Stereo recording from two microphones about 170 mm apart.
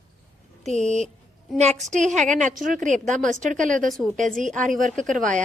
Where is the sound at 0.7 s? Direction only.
45° right (ahead or behind).